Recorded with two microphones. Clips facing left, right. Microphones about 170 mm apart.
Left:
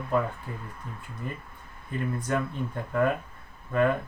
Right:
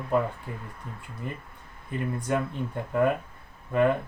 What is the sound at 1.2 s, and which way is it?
Speech, 20° right (ahead or behind).